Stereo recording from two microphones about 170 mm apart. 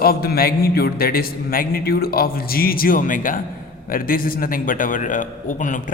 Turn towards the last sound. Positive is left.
turn(degrees=50)  # may be behind; listen again after turning